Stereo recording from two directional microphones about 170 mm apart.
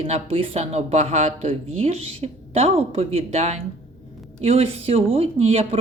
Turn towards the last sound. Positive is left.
turn(degrees=-35)  # may be behind; listen again after turning